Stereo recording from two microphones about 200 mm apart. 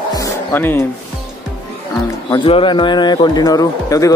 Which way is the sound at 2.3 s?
25° left (ahead or behind).